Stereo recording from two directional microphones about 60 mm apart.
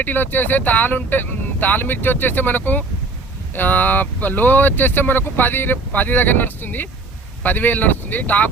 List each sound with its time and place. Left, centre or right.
0.0 s speech: left